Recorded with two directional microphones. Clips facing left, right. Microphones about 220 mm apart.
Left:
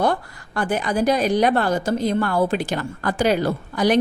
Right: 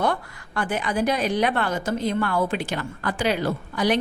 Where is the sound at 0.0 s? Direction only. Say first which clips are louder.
Left 3 dB; 35° left (ahead or behind).